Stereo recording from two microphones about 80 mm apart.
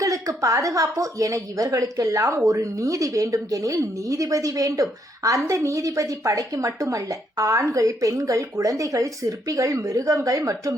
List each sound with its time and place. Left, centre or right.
0.0 s a woman's voice: right